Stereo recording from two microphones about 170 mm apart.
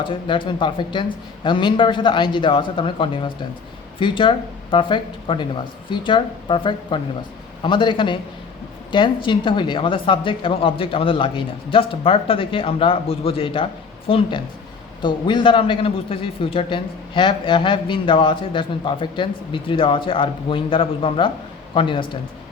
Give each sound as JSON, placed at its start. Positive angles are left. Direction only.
{"t": 0.0, "sound": "a man's voice", "side_deg": 30}